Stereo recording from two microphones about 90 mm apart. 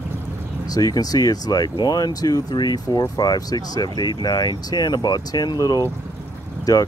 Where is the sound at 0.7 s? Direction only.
45° left (ahead or behind).